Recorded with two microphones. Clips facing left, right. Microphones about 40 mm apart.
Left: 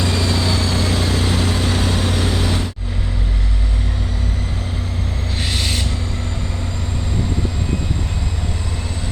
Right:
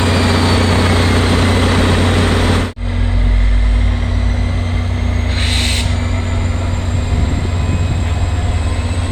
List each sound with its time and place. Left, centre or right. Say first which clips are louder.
0.0 s vehicle: right 6 dB; right
5.5 s vehicle: right 3 dB; right